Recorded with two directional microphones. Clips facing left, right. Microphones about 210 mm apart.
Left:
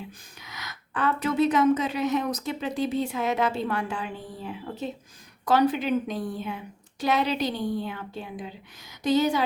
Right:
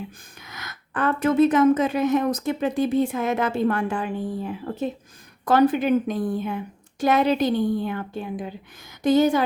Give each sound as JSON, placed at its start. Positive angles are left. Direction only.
{"t": 0.3, "sound": "a woman's voice", "side_deg": -50}